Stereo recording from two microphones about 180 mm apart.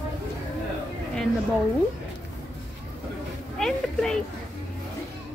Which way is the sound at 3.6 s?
5° left (ahead or behind).